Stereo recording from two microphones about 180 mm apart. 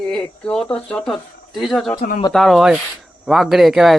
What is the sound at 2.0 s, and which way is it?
Speech, 45° left (ahead or behind).